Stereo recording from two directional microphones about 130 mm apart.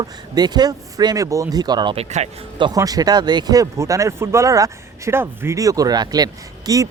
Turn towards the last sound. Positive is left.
turn(degrees=-30)  # may be behind; listen again after turning